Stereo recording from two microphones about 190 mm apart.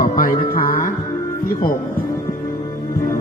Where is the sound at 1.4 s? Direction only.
50° left (ahead or behind).